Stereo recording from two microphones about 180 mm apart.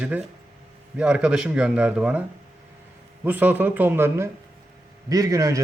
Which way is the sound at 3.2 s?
10° right (ahead or behind).